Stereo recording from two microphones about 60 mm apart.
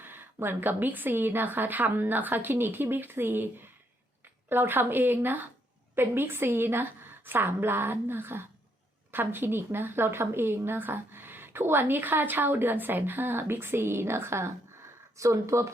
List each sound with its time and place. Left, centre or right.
0.0 s a woman's voice: right
15.2 s speech: right